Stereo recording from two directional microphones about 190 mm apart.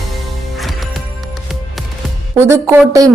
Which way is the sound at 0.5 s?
Centre (ahead or behind).